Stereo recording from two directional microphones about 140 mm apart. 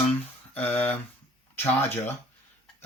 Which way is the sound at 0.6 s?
10° left (ahead or behind).